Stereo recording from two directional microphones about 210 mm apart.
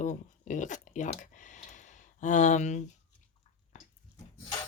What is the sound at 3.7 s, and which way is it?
Dog, 35° left (ahead or behind).